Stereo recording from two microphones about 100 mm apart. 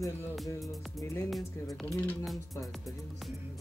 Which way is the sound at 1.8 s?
15° left (ahead or behind).